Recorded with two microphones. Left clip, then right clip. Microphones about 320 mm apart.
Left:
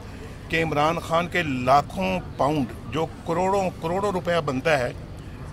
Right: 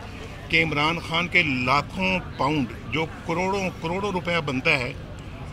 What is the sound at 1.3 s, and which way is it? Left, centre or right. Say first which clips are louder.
Speech: right 5 dB; left.